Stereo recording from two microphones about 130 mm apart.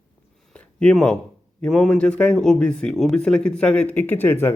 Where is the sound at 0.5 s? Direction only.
10° left (ahead or behind).